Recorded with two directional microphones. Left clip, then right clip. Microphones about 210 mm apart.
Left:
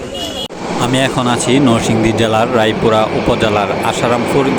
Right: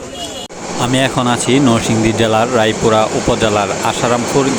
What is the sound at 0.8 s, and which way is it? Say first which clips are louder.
Speech: even; centre (ahead or behind).